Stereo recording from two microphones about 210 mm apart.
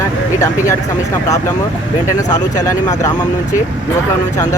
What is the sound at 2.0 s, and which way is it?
Speech, 15° left (ahead or behind).